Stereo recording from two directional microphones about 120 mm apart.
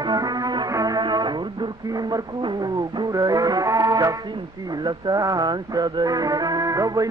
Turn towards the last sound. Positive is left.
turn(degrees=-30)  # may be behind; listen again after turning